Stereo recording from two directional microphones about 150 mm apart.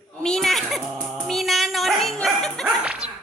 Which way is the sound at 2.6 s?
10° right (ahead or behind).